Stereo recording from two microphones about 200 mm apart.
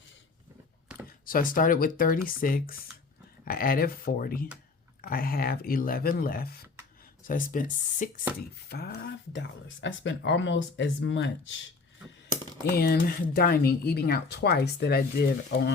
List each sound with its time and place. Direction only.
1.2 s speech: 45° left (ahead or behind)
8.7 s speech: 55° left (ahead or behind)
13.3 s speech: 50° left (ahead or behind)